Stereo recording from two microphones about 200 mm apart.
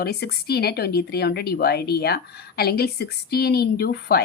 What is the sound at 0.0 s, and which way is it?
Speech, 55° left (ahead or behind).